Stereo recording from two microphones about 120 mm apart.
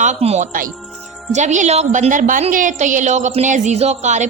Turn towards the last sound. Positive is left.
turn(degrees=-80)